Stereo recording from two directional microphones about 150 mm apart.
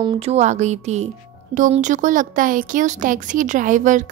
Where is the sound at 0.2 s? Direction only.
45° right (ahead or behind).